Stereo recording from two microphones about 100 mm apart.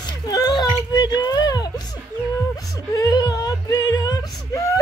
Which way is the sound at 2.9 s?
40° left (ahead or behind).